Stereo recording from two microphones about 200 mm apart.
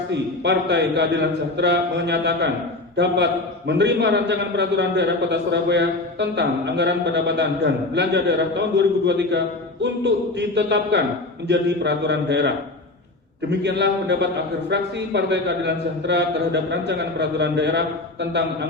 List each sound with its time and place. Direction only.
0.4 s a man's voice: 60° right (ahead or behind)